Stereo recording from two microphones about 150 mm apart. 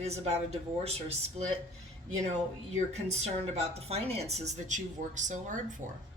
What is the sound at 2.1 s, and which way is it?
Speech, 50° right (ahead or behind).